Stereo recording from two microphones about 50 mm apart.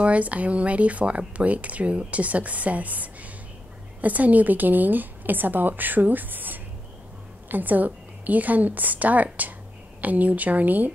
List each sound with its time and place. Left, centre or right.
0.0 s a woman's voice: right